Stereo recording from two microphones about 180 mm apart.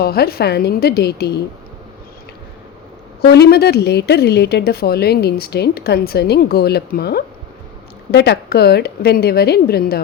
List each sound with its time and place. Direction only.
0.0 s speech: 60° left (ahead or behind)
3.2 s speech: 65° left (ahead or behind)